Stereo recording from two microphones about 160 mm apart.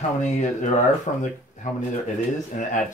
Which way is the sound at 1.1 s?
45° left (ahead or behind).